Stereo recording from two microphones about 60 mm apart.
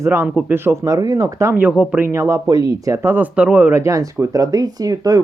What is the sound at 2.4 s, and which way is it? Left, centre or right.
Speech, right.